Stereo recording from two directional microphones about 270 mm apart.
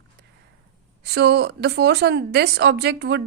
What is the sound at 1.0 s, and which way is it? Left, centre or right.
Speech, right.